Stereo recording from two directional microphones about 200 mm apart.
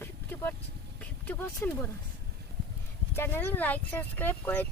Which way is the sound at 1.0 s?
10° left (ahead or behind).